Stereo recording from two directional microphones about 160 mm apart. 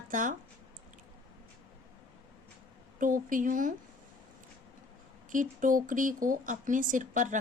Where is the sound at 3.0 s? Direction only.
55° right (ahead or behind).